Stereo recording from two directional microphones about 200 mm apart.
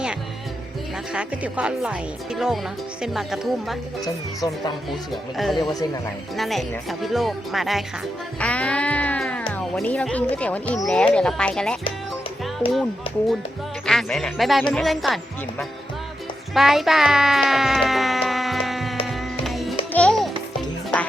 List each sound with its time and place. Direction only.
1.1 s speech: 5° right (ahead or behind)
4.0 s speech: 20° left (ahead or behind)
5.1 s speech: centre (ahead or behind)
13.8 s speech: centre (ahead or behind)
19.0 s music: centre (ahead or behind)